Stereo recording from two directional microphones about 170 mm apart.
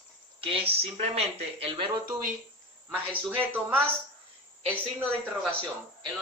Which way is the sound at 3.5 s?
10° right (ahead or behind).